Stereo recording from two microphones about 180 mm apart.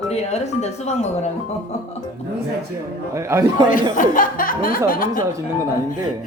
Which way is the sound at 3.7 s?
50° left (ahead or behind).